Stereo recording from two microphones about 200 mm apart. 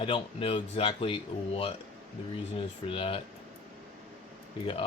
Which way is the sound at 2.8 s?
25° left (ahead or behind).